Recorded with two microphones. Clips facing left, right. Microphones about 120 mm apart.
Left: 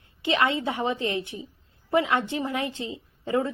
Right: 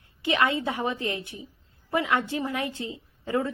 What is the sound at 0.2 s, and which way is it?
A woman's voice, 25° left (ahead or behind).